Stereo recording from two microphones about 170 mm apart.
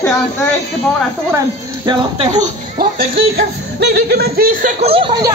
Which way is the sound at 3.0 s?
70° right (ahead or behind).